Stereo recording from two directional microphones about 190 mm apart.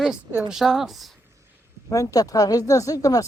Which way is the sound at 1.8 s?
15° left (ahead or behind).